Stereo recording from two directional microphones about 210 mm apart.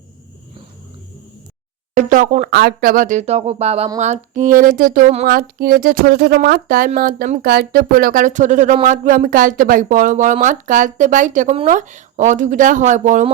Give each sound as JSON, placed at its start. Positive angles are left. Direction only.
{"t": 2.0, "sound": "speech", "side_deg": -35}